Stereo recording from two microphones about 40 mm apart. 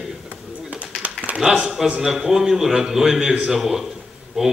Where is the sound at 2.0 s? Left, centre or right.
Centre.